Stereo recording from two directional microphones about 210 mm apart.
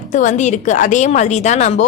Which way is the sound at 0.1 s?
35° left (ahead or behind).